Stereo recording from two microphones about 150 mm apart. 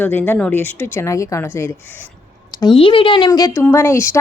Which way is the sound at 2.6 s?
30° left (ahead or behind).